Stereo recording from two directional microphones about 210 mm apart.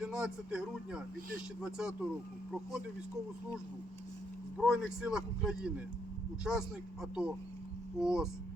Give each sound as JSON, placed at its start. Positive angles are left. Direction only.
{"t": 0.0, "sound": "speech", "side_deg": -5}
{"t": 4.5, "sound": "speech", "side_deg": -5}